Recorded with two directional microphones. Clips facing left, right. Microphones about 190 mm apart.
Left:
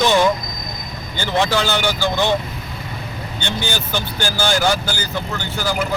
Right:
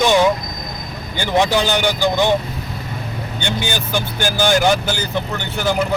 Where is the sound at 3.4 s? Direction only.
15° right (ahead or behind).